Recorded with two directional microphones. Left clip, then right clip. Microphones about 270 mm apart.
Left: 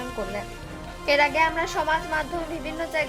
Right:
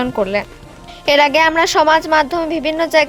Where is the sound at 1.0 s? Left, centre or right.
Right.